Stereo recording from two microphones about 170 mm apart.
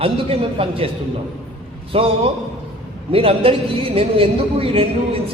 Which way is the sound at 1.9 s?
35° right (ahead or behind).